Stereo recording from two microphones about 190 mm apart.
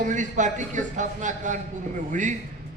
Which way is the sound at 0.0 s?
40° right (ahead or behind).